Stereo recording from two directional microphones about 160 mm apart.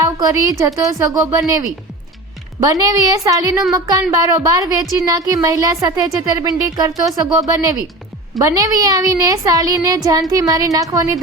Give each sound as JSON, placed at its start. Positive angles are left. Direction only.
{"t": 0.0, "sound": "a woman's voice", "side_deg": -25}